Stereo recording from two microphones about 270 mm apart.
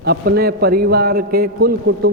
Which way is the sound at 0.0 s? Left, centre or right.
Right.